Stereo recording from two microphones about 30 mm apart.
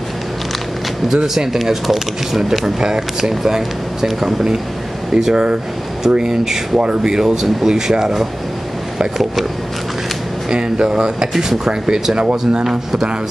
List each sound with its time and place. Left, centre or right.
1.0 s speech: centre
5.3 s speech: right
6.0 s speech: centre
10.5 s speech: right
12.2 s speech: right
12.6 s speech: centre